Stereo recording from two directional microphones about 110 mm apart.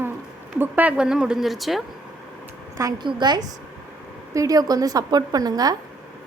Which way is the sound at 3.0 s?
45° right (ahead or behind).